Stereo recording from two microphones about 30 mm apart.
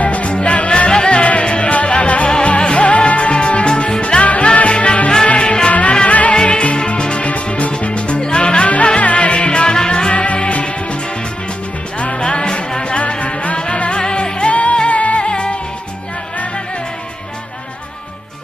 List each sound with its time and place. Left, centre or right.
0.0 s music: left
0.9 s music: left
1.2 s music: left
5.0 s music: left
6.1 s music: left
6.3 s music: left
7.3 s music: left
9.0 s music: left
12.2 s music: left
13.9 s music: left
14.5 s music: left
15.2 s music: left